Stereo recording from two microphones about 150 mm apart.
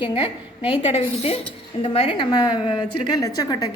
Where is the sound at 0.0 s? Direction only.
35° left (ahead or behind).